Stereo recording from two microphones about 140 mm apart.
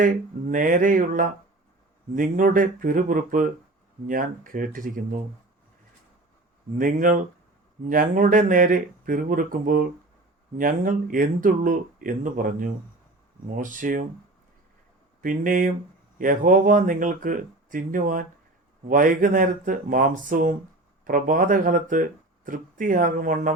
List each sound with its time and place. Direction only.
0.0 s speech: 70° right (ahead or behind)
6.7 s speech: 75° right (ahead or behind)
15.2 s speech: 75° right (ahead or behind)